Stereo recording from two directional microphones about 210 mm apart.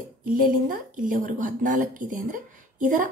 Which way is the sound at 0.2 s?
40° right (ahead or behind).